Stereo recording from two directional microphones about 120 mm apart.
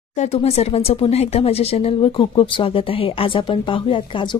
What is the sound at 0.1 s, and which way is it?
Speech, 65° left (ahead or behind).